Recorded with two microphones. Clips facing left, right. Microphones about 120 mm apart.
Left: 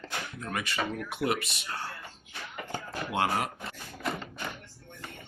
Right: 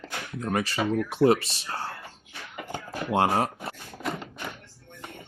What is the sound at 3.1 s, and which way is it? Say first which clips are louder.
Speech: right 6 dB; 30° right (ahead or behind).